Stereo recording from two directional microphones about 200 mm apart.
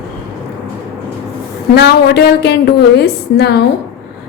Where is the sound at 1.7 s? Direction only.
55° left (ahead or behind).